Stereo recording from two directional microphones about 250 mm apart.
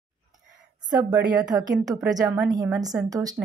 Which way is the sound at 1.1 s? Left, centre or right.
Centre.